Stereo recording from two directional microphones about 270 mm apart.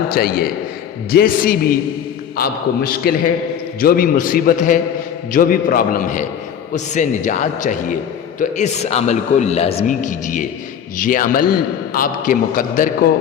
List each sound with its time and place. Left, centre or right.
0.1 s a man's voice: left